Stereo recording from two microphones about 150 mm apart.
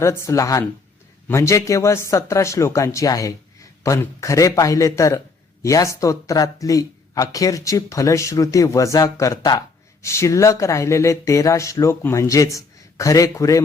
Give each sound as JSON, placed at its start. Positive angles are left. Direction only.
{"t": 0.0, "sound": "speech", "side_deg": 20}